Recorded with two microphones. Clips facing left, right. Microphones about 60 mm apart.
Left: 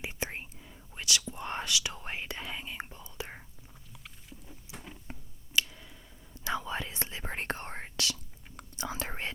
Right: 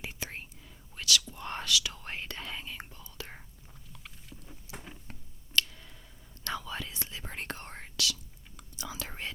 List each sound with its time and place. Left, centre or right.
0.0 s whispering: left
4.7 s a sound: centre
5.5 s tick: centre
6.6 s whispering: left